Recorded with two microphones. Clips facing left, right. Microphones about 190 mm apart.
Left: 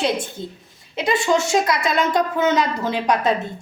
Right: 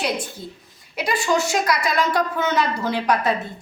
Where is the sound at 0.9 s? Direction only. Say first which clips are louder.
Left 2 dB; 25° left (ahead or behind).